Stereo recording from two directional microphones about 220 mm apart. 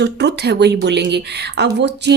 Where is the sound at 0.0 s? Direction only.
50° right (ahead or behind).